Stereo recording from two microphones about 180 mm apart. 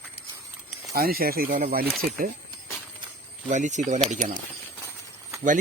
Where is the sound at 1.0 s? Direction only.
55° right (ahead or behind).